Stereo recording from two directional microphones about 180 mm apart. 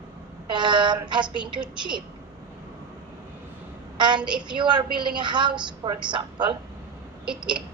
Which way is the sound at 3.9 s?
25° right (ahead or behind).